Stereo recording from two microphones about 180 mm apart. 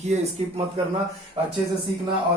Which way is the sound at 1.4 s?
30° right (ahead or behind).